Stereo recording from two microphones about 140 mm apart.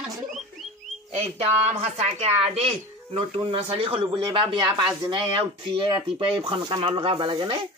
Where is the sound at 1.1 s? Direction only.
50° right (ahead or behind); by 4.8 s 35° right (ahead or behind).